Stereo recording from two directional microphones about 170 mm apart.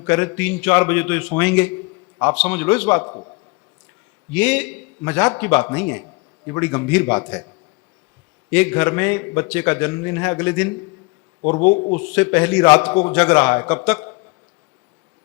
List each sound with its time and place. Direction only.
0.0 s a man's voice: 10° left (ahead or behind)
4.3 s a man's voice: 5° left (ahead or behind)
8.4 s a man's voice: 10° left (ahead or behind)